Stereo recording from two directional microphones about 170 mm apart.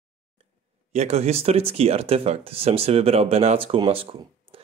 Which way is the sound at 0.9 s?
40° right (ahead or behind).